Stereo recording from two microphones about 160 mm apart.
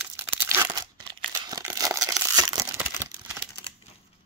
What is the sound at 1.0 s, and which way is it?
Crumpling, 25° right (ahead or behind).